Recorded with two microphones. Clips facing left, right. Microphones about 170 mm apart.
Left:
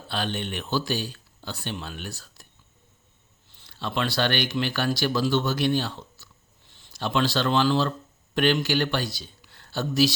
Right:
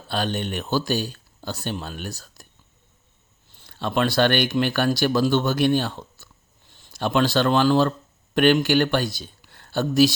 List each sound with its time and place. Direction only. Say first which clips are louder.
0.1 s speech: right 4 dB; 45° right (ahead or behind)
3.6 s speech: right 5 dB; 50° right (ahead or behind)